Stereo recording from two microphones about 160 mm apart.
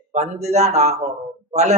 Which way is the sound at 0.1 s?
45° right (ahead or behind).